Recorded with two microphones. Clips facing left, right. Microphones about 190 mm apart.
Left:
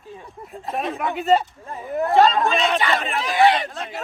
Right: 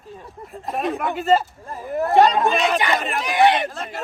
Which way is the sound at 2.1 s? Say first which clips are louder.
Right 1 dB; 20° right (ahead or behind).